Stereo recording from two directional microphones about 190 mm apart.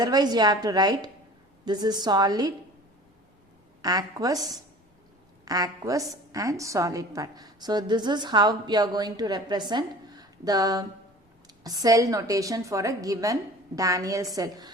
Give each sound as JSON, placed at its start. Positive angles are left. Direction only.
{"t": 0.0, "sound": "a woman's voice", "side_deg": -20}
{"t": 3.8, "sound": "a woman's voice", "side_deg": -20}